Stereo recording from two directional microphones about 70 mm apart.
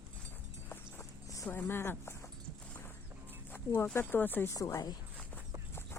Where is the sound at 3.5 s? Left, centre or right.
Left.